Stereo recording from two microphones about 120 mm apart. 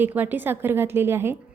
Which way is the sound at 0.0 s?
15° right (ahead or behind).